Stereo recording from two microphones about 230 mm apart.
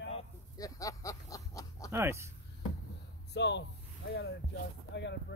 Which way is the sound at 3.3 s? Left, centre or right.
Left.